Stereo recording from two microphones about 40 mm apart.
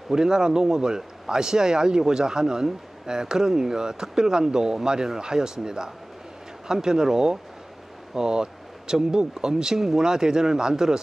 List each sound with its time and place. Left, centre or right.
0.1 s speech: centre